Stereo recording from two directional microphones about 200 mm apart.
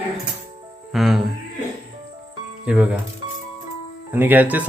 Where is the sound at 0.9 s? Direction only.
Centre (ahead or behind).